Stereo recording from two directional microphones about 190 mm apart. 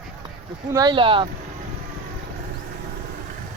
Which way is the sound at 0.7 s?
20° right (ahead or behind).